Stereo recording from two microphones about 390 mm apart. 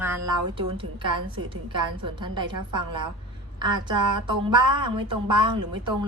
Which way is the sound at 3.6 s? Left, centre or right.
Centre.